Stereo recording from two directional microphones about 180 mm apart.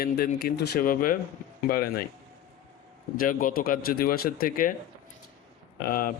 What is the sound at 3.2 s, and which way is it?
Speech, 50° left (ahead or behind).